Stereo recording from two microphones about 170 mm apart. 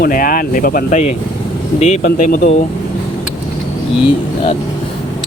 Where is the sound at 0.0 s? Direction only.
55° left (ahead or behind).